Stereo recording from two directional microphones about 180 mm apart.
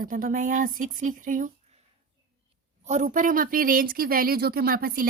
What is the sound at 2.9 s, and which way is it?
Speech, 45° right (ahead or behind).